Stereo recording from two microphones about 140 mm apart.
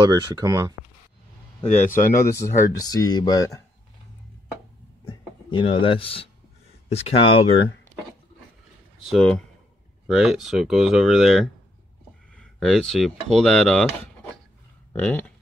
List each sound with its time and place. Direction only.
0.0 s speech: 30° right (ahead or behind)
1.6 s speech: 55° left (ahead or behind)
2.3 s speech: 25° left (ahead or behind)
5.0 s speech: 35° left (ahead or behind)
7.9 s wood: 60° right (ahead or behind)
9.1 s speech: 5° left (ahead or behind)
14.9 s speech: 15° left (ahead or behind)